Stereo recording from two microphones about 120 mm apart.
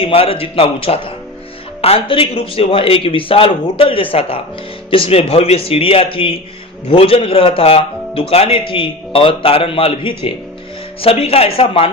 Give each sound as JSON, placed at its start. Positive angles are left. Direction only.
{"t": 0.0, "sound": "a man's voice", "side_deg": 50}